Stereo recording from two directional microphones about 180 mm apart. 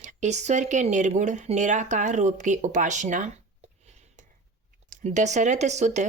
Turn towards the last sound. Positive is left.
turn(degrees=-40)  # may be behind; listen again after turning